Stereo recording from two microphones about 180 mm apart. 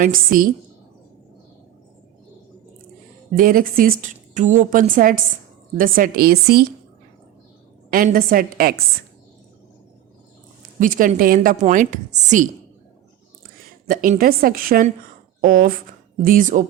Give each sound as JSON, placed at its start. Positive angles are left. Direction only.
{"t": 0.0, "sound": "a woman's voice", "side_deg": -50}
{"t": 3.3, "sound": "a woman's voice", "side_deg": -50}
{"t": 7.9, "sound": "a woman's voice", "side_deg": -55}
{"t": 10.8, "sound": "a woman's voice", "side_deg": -50}
{"t": 13.8, "sound": "a woman's voice", "side_deg": -50}